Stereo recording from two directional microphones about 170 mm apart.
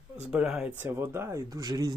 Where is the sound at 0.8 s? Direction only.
15° right (ahead or behind).